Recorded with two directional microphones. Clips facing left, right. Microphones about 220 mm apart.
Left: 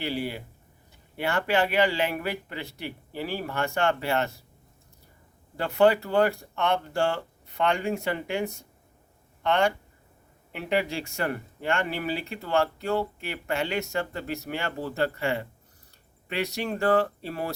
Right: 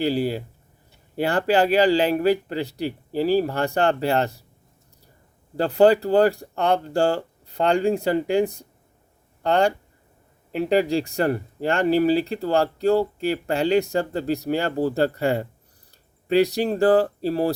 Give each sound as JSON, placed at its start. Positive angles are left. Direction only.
{"t": 0.0, "sound": "speech", "side_deg": -35}
{"t": 5.5, "sound": "speech", "side_deg": -35}